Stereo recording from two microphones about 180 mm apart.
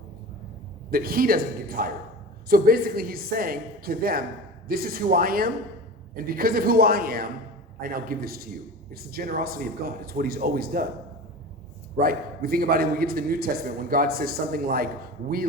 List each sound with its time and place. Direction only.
0.9 s a man's voice: 55° right (ahead or behind)
11.9 s a man's voice: 55° right (ahead or behind)